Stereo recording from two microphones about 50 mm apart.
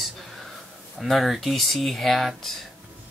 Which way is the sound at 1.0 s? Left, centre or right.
Centre.